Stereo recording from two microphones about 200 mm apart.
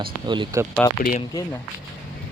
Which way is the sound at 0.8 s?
10° left (ahead or behind).